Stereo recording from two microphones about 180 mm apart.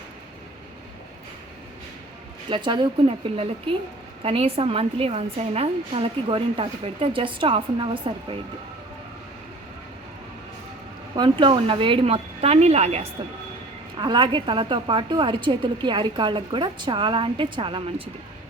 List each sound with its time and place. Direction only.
2.5 s a woman's voice: 25° right (ahead or behind)
11.1 s a woman's voice: 30° right (ahead or behind)
14.0 s a woman's voice: 25° right (ahead or behind)